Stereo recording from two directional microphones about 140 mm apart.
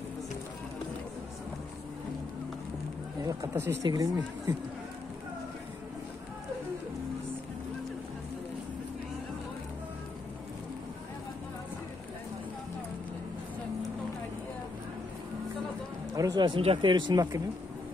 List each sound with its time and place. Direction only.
3.3 s speech: 15° right (ahead or behind)
16.2 s speech: 30° right (ahead or behind)